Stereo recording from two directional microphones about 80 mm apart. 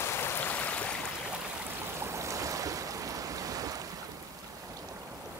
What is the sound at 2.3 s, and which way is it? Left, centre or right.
Stream, right.